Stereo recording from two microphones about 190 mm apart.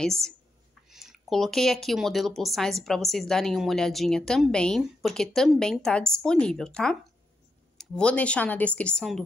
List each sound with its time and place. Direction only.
0.0 s speech: centre (ahead or behind)